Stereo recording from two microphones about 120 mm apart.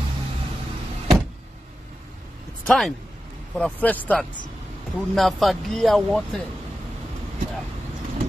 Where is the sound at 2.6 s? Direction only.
5° left (ahead or behind).